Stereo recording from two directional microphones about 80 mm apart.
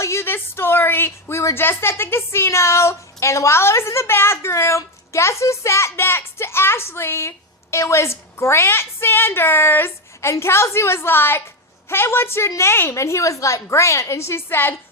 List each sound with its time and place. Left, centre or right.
0.0 s a woman's voice: left